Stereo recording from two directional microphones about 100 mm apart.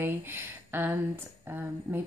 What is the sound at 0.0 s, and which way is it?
Speech, 20° right (ahead or behind).